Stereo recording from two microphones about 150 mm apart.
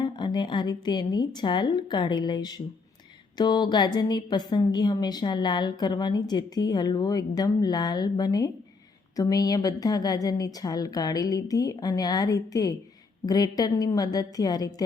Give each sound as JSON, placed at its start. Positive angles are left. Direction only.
{"t": 0.0, "sound": "a woman's voice", "side_deg": 30}